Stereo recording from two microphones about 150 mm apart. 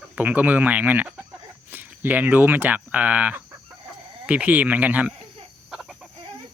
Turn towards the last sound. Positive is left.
turn(degrees=-5)  # may be behind; listen again after turning